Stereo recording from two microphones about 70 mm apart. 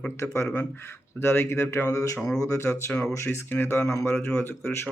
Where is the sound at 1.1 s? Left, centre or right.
Left.